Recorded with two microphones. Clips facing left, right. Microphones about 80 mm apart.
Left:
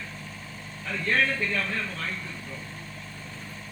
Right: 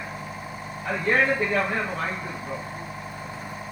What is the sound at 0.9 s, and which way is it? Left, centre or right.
Speech, right.